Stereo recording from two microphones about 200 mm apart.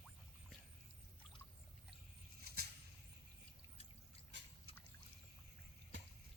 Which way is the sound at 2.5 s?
50° right (ahead or behind).